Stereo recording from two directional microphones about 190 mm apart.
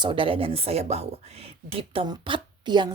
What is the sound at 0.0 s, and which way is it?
A woman's voice, 25° right (ahead or behind).